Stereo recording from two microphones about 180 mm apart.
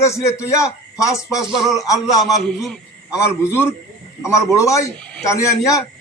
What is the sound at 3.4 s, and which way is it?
A man's voice, 15° left (ahead or behind).